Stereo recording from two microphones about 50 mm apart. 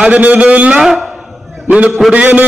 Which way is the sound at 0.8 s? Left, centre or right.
Centre.